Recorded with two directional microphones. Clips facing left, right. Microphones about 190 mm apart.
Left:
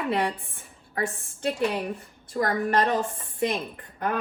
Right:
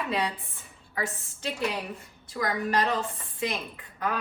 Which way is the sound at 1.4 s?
55° left (ahead or behind).